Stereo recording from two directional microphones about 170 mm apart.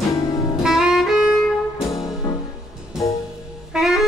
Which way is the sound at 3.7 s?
Centre (ahead or behind).